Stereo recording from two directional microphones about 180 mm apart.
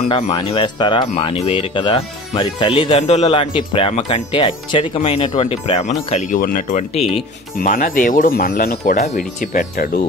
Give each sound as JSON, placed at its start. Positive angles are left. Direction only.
{"t": 0.1, "sound": "speech", "side_deg": 25}
{"t": 1.1, "sound": "speech", "side_deg": 35}
{"t": 5.5, "sound": "speech", "side_deg": 40}
{"t": 7.6, "sound": "speech", "side_deg": 50}